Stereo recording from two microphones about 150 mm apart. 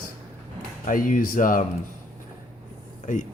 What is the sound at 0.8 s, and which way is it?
Speech, 60° left (ahead or behind).